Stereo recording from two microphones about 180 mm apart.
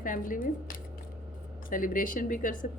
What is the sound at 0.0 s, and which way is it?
A woman's voice, 50° left (ahead or behind).